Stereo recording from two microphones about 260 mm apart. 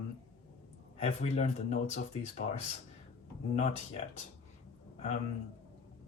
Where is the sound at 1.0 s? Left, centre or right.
Left.